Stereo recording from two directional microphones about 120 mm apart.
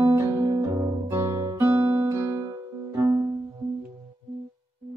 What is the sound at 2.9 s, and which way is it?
Music, 25° right (ahead or behind).